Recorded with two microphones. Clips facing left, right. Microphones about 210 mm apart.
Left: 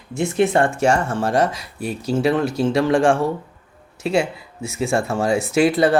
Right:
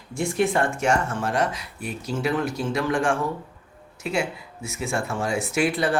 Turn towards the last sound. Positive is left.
turn(degrees=35)  # may be behind; listen again after turning